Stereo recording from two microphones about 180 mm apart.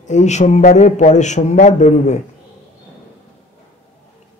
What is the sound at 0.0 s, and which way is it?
A man's voice, 40° left (ahead or behind).